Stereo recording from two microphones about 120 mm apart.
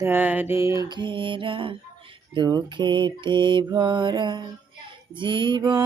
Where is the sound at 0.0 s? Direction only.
15° right (ahead or behind).